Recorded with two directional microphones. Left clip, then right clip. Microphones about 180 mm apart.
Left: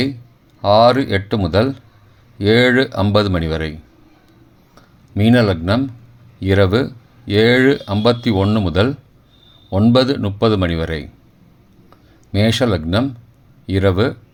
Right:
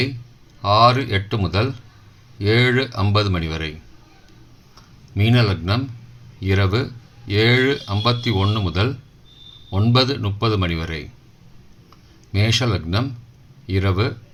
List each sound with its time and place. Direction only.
0.6 s speech: 50° left (ahead or behind)
5.1 s speech: 45° left (ahead or behind)
12.3 s speech: 45° left (ahead or behind)